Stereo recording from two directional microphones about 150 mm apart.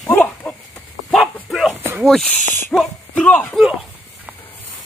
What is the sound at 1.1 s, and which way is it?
Bow-wow, centre (ahead or behind).